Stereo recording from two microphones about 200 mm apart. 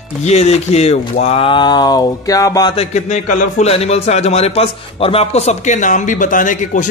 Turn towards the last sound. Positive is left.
turn(degrees=40)  # may be behind; listen again after turning